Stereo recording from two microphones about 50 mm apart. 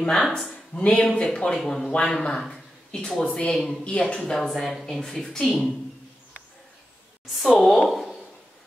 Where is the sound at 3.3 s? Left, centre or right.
Left.